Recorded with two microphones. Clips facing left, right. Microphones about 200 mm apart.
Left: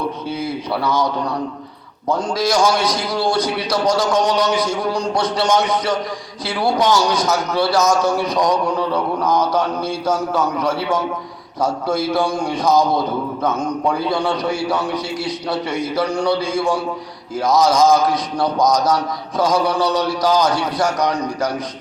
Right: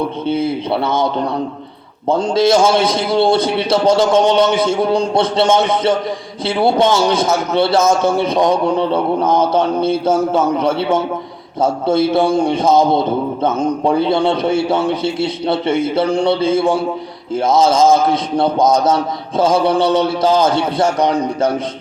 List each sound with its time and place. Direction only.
0.3 s a man's voice: 25° right (ahead or behind)